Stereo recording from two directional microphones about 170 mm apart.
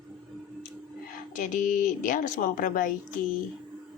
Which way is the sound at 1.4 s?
45° left (ahead or behind).